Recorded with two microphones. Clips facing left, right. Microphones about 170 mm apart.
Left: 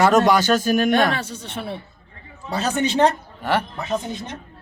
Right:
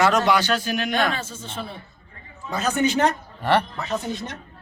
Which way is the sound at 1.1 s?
70° left (ahead or behind).